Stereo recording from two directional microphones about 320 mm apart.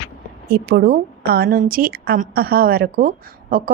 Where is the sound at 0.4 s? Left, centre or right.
Right.